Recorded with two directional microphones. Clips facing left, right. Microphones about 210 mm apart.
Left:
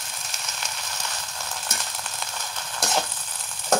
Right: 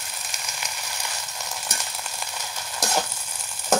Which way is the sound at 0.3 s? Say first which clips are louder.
Even; 10° right (ahead or behind).